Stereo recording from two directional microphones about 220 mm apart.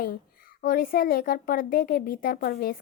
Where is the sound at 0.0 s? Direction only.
40° left (ahead or behind).